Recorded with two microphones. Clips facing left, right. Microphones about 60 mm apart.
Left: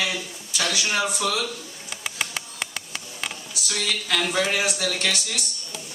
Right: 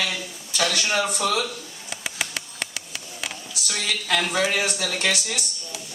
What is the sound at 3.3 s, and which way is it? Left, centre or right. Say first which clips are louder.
A woman's voice: right 1 dB; centre.